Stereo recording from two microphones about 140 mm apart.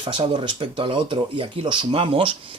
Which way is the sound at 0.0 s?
35° right (ahead or behind).